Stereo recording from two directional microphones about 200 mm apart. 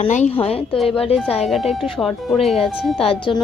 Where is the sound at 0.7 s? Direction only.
Centre (ahead or behind).